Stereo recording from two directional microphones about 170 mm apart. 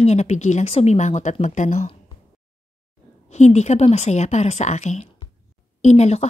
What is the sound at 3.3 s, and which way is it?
A woman's voice, 40° left (ahead or behind).